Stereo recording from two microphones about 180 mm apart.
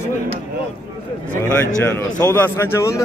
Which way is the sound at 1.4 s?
15° left (ahead or behind).